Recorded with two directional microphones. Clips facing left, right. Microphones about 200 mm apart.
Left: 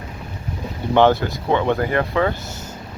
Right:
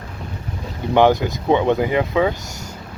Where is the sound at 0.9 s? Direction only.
15° right (ahead or behind).